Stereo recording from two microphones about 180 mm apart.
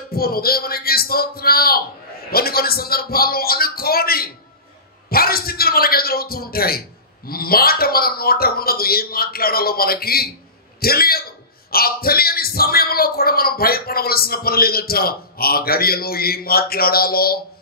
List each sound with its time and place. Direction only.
0.1 s speech: 55° left (ahead or behind)